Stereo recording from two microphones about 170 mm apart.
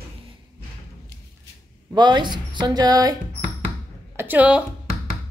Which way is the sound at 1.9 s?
25° right (ahead or behind).